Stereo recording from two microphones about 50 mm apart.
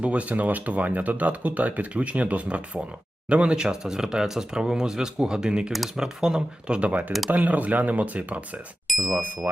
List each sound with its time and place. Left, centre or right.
0.0 s speech: right
7.3 s speech: right
8.9 s ding: centre